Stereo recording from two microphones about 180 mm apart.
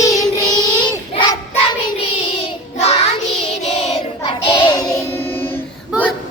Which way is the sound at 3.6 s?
35° left (ahead or behind).